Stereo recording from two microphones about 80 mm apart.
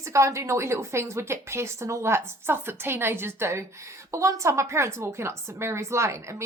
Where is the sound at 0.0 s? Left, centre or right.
Right.